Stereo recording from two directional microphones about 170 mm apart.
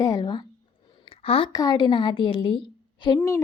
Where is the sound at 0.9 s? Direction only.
30° left (ahead or behind).